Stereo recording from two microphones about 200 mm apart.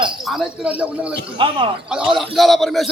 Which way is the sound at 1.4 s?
25° right (ahead or behind).